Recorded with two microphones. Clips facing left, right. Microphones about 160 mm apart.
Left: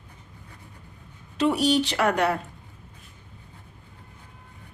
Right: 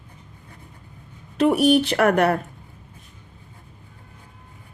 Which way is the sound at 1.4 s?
55° right (ahead or behind).